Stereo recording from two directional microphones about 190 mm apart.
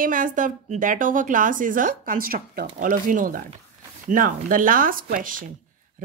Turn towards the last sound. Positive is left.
turn(degrees=-45)  # may be behind; listen again after turning